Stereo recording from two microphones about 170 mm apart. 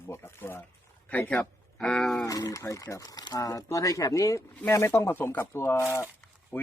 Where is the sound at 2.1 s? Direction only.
20° left (ahead or behind).